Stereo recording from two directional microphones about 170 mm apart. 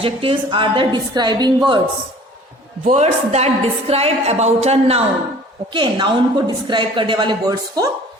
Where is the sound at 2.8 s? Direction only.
40° right (ahead or behind).